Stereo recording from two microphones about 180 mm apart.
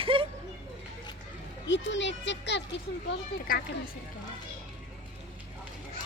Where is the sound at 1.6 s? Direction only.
90° left.